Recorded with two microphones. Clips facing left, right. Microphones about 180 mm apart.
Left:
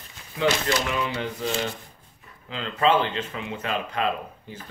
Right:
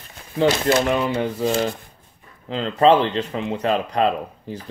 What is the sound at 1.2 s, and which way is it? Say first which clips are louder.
Speech: right 7 dB; 40° right (ahead or behind).